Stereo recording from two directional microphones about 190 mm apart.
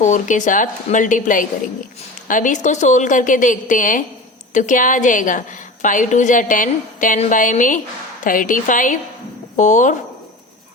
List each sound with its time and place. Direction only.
0.0 s a woman's voice: 40° left (ahead or behind)